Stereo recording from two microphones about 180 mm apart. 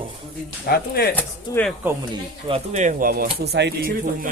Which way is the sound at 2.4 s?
35° right (ahead or behind).